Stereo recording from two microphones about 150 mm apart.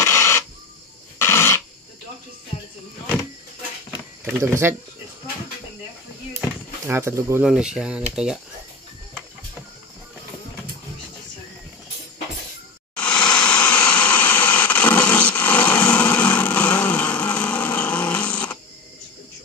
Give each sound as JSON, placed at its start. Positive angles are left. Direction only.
{"t": 0.0, "sound": "a sound", "side_deg": 20}
{"t": 1.1, "sound": "dog", "side_deg": 15}
{"t": 4.2, "sound": "speech", "side_deg": -15}
{"t": 6.9, "sound": "speech", "side_deg": -15}
{"t": 7.4, "sound": "speech", "side_deg": -5}
{"t": 12.9, "sound": "a sound", "side_deg": 5}